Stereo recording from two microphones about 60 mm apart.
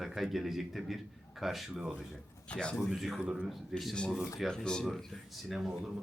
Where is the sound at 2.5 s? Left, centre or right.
Centre.